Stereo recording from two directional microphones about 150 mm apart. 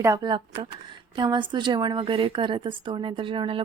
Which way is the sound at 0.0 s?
20° right (ahead or behind).